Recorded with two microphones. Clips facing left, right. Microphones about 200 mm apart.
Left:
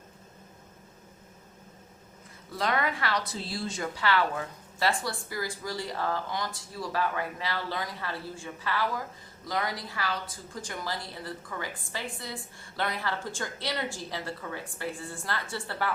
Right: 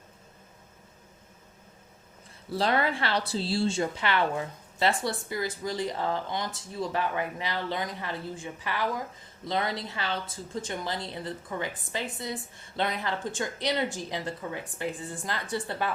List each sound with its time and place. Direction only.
2.5 s a woman's voice: 30° right (ahead or behind)